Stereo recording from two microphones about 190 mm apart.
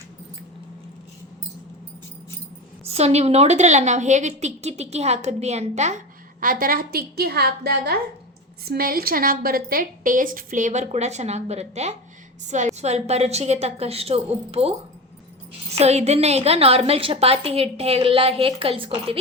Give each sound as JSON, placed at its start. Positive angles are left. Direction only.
{"t": 2.8, "sound": "a woman's voice", "side_deg": -35}
{"t": 6.4, "sound": "a woman's voice", "side_deg": -50}
{"t": 15.8, "sound": "a woman's voice", "side_deg": -35}